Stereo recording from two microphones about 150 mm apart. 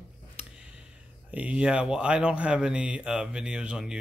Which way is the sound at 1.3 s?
10° right (ahead or behind).